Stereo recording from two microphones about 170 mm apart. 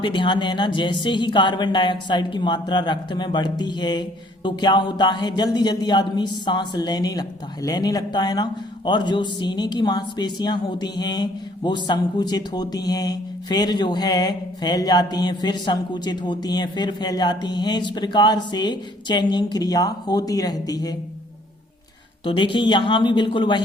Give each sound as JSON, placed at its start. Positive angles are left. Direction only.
{"t": 0.0, "sound": "a man's voice", "side_deg": 30}
{"t": 22.2, "sound": "a man's voice", "side_deg": 30}